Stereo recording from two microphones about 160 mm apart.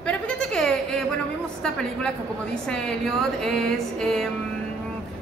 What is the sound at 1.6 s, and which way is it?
Speech, 5° left (ahead or behind).